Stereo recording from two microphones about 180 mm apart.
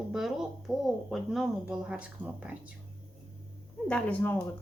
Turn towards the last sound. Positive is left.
turn(degrees=10)  # may be behind; listen again after turning